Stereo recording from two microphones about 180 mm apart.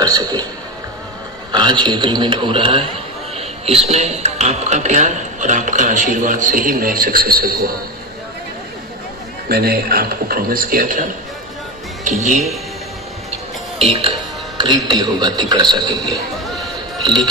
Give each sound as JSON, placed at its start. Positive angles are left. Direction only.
{"t": 0.0, "sound": "a man's voice", "side_deg": -20}
{"t": 1.5, "sound": "a man's voice", "side_deg": -25}
{"t": 9.5, "sound": "a man's voice", "side_deg": -60}
{"t": 12.2, "sound": "speech", "side_deg": -40}
{"t": 13.7, "sound": "a man's voice", "side_deg": -30}